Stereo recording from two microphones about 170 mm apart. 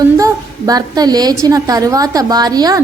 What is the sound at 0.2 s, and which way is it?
A woman's voice, 20° right (ahead or behind).